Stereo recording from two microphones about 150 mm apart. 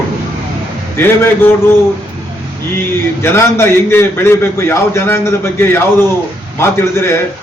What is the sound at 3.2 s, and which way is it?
A man's voice, 15° left (ahead or behind).